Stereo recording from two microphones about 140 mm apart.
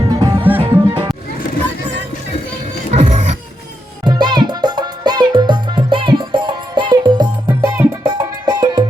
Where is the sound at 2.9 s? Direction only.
60° right (ahead or behind).